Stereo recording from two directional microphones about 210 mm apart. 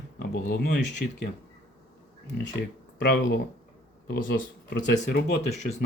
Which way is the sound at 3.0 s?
50° left (ahead or behind).